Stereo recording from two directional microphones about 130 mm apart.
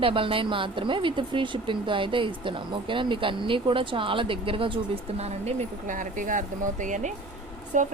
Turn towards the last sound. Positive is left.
turn(degrees=-70)  # may be behind; listen again after turning